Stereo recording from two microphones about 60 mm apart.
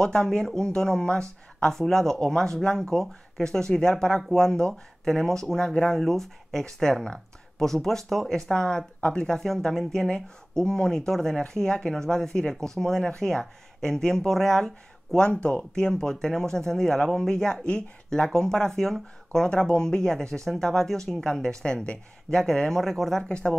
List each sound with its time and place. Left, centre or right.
0.0 s speech: centre
5.9 s speech: centre
23.2 s speech: centre